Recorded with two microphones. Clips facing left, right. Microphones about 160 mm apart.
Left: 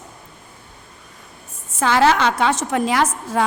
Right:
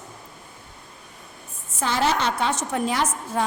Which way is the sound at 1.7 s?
90° left.